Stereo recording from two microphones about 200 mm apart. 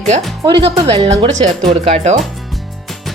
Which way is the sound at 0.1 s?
30° right (ahead or behind).